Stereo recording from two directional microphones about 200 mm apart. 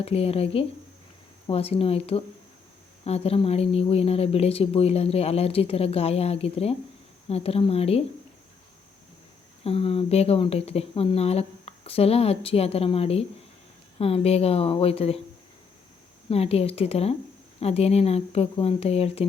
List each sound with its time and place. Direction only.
0.0 s speech: 30° left (ahead or behind)
9.6 s speech: 30° left (ahead or behind)
16.3 s speech: 30° left (ahead or behind)